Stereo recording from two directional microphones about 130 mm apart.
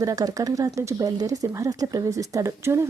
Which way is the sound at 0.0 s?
25° right (ahead or behind).